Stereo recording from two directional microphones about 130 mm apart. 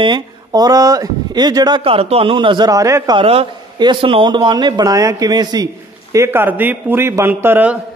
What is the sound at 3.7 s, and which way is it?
Speech, 35° right (ahead or behind).